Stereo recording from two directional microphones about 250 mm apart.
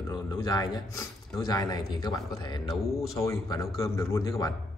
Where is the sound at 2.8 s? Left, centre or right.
Centre.